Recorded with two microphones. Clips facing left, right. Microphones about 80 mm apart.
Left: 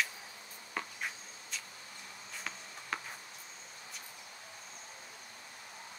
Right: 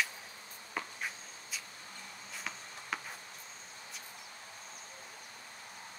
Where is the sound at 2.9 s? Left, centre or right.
Centre.